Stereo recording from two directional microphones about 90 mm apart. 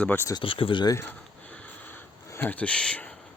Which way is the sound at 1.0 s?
15° left (ahead or behind).